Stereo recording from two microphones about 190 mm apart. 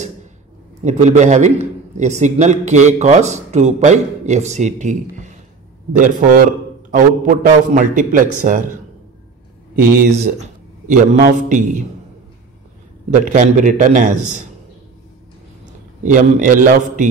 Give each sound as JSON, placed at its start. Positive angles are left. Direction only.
{"t": 0.8, "sound": "a man's voice", "side_deg": -40}
{"t": 5.9, "sound": "a man's voice", "side_deg": -45}
{"t": 9.8, "sound": "a man's voice", "side_deg": -50}
{"t": 10.4, "sound": "a man's voice", "side_deg": -45}
{"t": 13.1, "sound": "a man's voice", "side_deg": -40}
{"t": 16.0, "sound": "a man's voice", "side_deg": -40}